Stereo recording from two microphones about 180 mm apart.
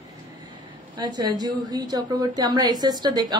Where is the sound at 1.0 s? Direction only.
25° right (ahead or behind).